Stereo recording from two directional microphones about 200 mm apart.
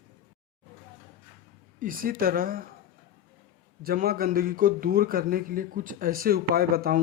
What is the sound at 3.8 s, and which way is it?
A man's voice, 50° right (ahead or behind).